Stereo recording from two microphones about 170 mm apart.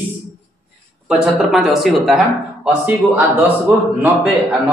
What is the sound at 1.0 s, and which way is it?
A man's voice, 5° right (ahead or behind).